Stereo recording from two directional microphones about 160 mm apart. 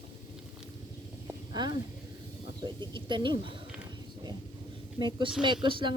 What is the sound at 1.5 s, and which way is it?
Speech, 25° right (ahead or behind).